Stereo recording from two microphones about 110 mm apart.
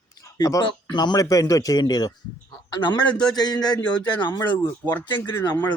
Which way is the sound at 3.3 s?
40° left (ahead or behind).